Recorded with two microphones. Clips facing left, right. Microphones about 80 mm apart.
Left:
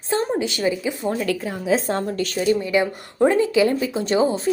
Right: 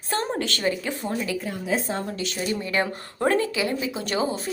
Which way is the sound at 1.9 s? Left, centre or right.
Left.